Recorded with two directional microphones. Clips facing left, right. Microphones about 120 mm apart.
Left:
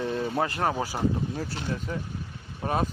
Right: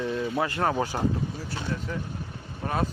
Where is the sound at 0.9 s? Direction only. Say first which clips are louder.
Even; 5° left (ahead or behind).